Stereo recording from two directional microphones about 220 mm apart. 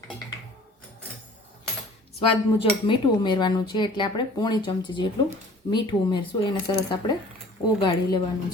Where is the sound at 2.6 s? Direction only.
20° left (ahead or behind).